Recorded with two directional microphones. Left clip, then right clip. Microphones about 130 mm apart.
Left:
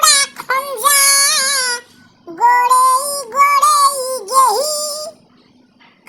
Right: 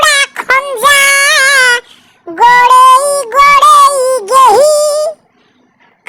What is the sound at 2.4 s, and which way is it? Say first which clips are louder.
Yodeling: right 7 dB; 70° right (ahead or behind).